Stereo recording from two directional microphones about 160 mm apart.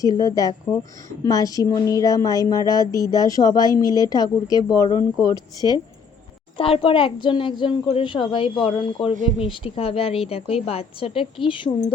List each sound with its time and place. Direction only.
0.0 s a woman's voice: 20° left (ahead or behind)